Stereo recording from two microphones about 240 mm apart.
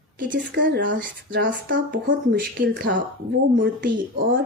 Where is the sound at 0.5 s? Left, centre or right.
Right.